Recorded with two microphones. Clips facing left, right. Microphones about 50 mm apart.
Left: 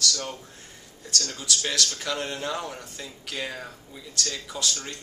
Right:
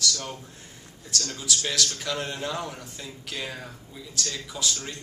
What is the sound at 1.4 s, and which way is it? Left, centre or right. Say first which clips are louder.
A man's voice: right 1 dB; centre.